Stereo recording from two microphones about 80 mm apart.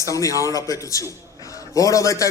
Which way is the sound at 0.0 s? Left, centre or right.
Left.